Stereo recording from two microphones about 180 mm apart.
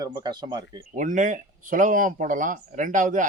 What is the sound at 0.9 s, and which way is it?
Speech, 45° right (ahead or behind).